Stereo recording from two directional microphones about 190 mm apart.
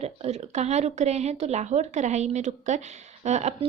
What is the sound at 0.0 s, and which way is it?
Speech, 35° right (ahead or behind).